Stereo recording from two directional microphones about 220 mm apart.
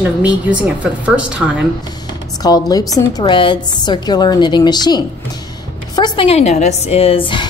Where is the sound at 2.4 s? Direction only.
15° left (ahead or behind).